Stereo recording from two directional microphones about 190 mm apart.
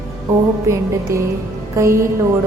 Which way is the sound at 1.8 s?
15° right (ahead or behind).